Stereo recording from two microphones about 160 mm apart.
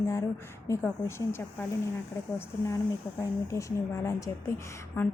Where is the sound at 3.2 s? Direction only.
20° left (ahead or behind).